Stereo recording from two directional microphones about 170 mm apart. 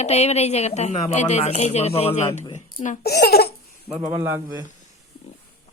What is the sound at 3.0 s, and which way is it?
Speech, 65° left (ahead or behind).